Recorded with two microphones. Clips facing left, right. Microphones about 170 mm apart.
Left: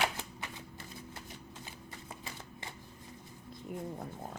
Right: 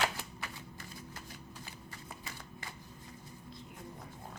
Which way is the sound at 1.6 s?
25° left (ahead or behind).